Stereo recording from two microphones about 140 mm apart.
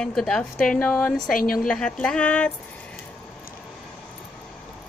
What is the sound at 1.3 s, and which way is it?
Speech, 85° left.